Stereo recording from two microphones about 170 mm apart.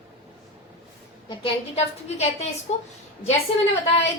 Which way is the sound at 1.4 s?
40° left (ahead or behind).